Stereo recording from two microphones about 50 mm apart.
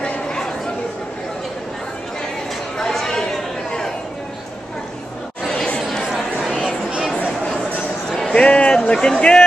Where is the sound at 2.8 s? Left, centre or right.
Centre.